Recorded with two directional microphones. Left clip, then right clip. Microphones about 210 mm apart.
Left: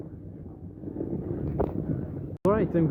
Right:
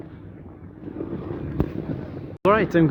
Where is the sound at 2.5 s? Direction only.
25° right (ahead or behind).